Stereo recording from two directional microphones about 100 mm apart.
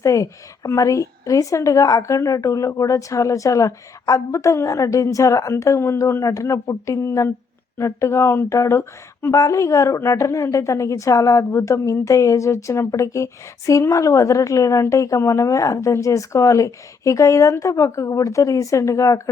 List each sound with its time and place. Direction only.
0.0 s speech: 35° left (ahead or behind)